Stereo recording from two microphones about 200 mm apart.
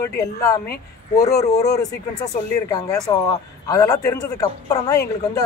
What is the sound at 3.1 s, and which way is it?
Speech, 20° left (ahead or behind).